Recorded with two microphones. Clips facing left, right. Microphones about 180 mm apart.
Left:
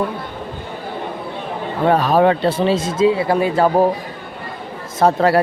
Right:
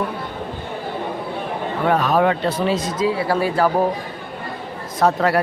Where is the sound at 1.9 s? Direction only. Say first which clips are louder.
Left 3 dB; 30° left (ahead or behind).